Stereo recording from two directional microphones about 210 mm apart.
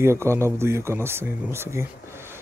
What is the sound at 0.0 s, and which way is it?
Speech, 10° right (ahead or behind).